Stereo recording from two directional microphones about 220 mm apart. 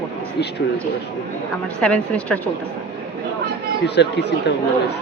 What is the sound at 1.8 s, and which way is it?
Speech, 5° left (ahead or behind).